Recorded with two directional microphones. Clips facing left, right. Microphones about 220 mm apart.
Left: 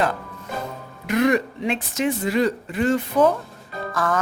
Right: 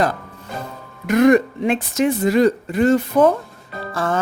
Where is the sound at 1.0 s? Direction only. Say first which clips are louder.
Right 6 dB; 45° right (ahead or behind).